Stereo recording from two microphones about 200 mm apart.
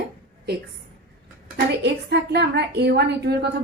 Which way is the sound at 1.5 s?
55° right (ahead or behind).